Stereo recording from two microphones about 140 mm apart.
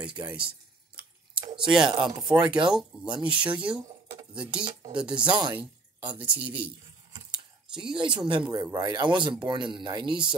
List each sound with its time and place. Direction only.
0.2 s speech: 20° right (ahead or behind)
1.6 s speech: 5° right (ahead or behind)
7.3 s a sound: 5° right (ahead or behind)
8.1 s speech: 35° right (ahead or behind)